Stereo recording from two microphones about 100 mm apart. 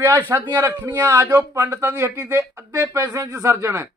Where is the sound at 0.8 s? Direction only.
30° right (ahead or behind).